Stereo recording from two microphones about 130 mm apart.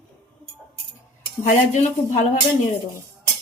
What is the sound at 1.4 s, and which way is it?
Speech, 65° left (ahead or behind).